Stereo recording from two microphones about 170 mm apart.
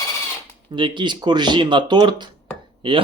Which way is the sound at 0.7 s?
30° right (ahead or behind).